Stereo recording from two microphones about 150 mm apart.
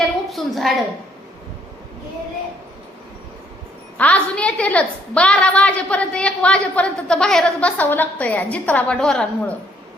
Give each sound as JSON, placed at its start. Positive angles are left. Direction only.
{"t": 0.3, "sound": "a woman's voice", "side_deg": 0}
{"t": 3.9, "sound": "a woman's voice", "side_deg": 10}